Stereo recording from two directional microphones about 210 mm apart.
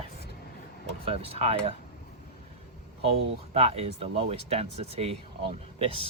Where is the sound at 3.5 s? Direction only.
30° right (ahead or behind).